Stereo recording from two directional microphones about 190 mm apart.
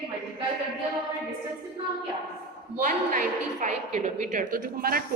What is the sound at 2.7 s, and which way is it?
A woman's voice, 45° right (ahead or behind).